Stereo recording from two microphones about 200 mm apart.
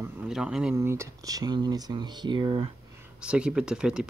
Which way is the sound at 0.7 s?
15° right (ahead or behind).